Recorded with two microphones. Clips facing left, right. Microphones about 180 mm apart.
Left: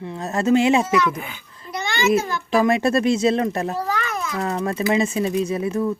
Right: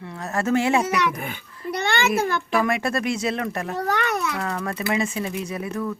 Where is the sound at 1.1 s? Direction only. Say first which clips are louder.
Right 1 dB; 55° right (ahead or behind).